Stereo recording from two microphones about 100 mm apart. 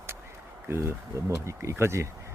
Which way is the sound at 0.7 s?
25° right (ahead or behind).